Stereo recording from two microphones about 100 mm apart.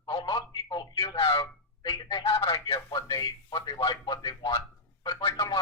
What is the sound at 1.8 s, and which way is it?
Speech, 45° left (ahead or behind).